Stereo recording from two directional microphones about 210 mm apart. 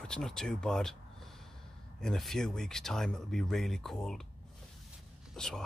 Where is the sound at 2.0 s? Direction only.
Centre (ahead or behind).